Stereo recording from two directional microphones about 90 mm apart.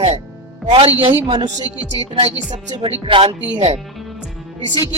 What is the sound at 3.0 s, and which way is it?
Speech, 80° right.